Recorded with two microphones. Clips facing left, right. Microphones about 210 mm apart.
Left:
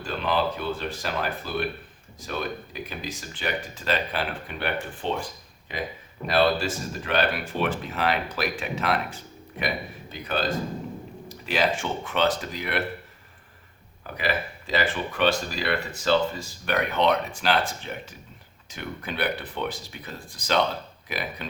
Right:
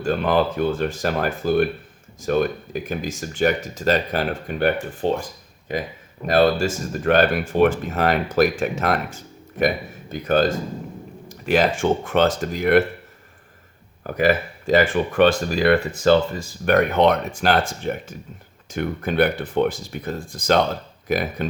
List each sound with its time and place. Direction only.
0.0 s speech: 50° right (ahead or behind)
14.1 s speech: 45° right (ahead or behind)